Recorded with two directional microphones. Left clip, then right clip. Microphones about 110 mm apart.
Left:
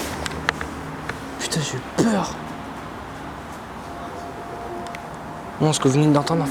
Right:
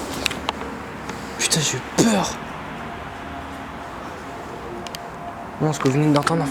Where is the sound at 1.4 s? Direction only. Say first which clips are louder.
Right 5 dB; 10° right (ahead or behind).